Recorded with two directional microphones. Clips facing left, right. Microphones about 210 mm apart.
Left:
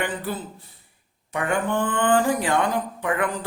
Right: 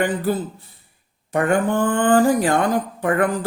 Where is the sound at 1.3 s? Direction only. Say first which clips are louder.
Right 6 dB; 40° right (ahead or behind).